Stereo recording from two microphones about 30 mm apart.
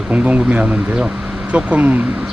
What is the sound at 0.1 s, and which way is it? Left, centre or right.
Speech, right.